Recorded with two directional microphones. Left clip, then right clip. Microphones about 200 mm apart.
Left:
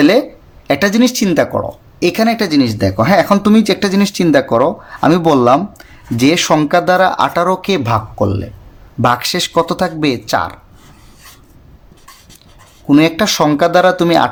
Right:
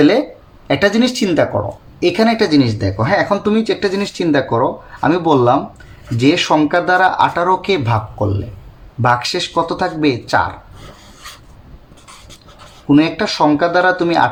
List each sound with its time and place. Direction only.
0.0 s a sound: 40° left (ahead or behind)
0.7 s speech: 40° left (ahead or behind)
12.9 s speech: 45° left (ahead or behind)